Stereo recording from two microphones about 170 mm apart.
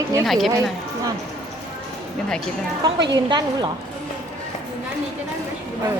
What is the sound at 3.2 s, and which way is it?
Speech, 25° right (ahead or behind).